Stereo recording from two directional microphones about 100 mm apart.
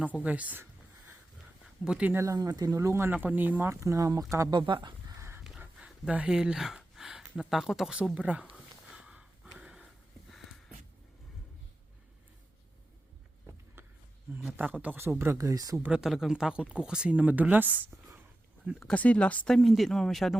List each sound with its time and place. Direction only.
0.2 s a sound: 15° right (ahead or behind)
1.6 s a sound: 5° right (ahead or behind)
2.1 s speech: 35° right (ahead or behind)
2.8 s speech: 25° right (ahead or behind)
4.5 s speech: 50° right (ahead or behind)
5.4 s speech: 10° right (ahead or behind)
8.9 s snort: 10° right (ahead or behind)
13.8 s a sound: 25° right (ahead or behind)
14.5 s speech: 15° right (ahead or behind)
15.4 s speech: 35° right (ahead or behind)
15.8 s speech: 5° right (ahead or behind)
18.8 s speech: 10° left (ahead or behind)